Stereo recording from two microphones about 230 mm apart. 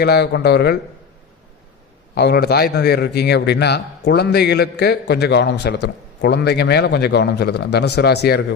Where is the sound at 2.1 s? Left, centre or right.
Left.